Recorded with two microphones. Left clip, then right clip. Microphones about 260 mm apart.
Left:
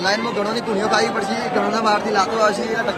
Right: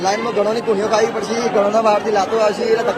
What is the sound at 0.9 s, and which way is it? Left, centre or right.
Speech, left.